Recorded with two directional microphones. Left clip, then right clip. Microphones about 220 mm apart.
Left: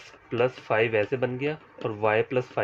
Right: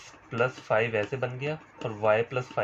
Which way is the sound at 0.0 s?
50° left (ahead or behind).